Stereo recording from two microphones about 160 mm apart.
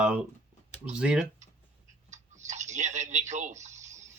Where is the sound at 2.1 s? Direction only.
45° right (ahead or behind).